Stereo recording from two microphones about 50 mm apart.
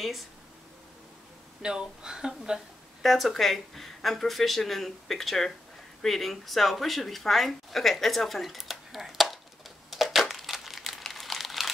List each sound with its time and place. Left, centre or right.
1.6 s speech: centre
3.0 s speech: centre
9.8 s crumpling: centre